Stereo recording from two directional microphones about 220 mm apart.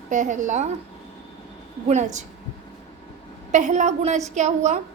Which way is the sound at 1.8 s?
30° right (ahead or behind).